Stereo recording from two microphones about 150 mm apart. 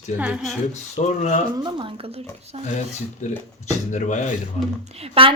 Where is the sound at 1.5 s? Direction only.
30° right (ahead or behind).